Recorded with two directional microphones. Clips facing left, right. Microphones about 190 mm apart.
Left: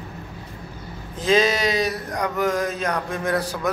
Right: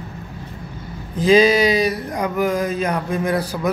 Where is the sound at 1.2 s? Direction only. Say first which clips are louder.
Right 6 dB; centre (ahead or behind).